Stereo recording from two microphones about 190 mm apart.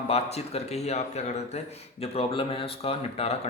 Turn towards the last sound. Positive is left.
turn(degrees=30)  # may be behind; listen again after turning